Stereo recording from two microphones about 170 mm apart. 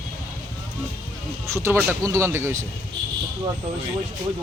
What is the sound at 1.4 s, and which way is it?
Speech, 15° right (ahead or behind).